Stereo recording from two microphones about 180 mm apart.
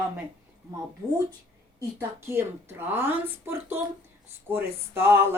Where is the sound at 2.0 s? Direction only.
15° right (ahead or behind).